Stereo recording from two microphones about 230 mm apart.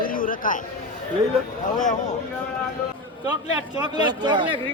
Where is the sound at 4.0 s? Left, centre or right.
Centre.